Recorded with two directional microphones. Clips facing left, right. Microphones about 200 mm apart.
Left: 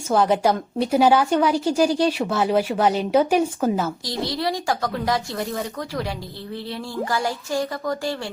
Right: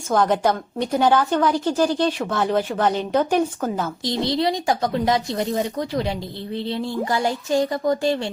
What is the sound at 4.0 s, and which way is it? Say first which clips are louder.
A woman's voice: right 4 dB; 25° right (ahead or behind).